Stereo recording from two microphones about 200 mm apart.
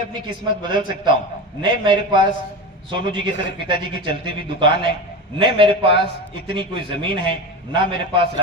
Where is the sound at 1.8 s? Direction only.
25° right (ahead or behind).